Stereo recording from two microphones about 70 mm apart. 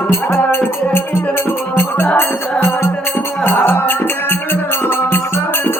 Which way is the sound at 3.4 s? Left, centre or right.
Left.